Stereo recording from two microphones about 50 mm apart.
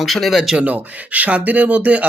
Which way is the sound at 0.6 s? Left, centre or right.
Right.